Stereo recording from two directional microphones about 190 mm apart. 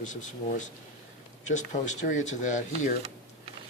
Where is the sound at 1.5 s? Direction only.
40° left (ahead or behind).